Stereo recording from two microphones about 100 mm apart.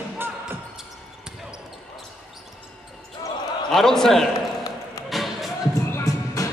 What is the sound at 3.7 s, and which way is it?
Basketball bounce, 5° left (ahead or behind).